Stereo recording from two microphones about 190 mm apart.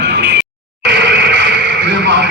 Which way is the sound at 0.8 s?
65° right (ahead or behind).